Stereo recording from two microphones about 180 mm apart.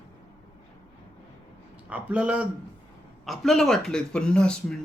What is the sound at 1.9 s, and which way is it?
A man's voice, 5° right (ahead or behind).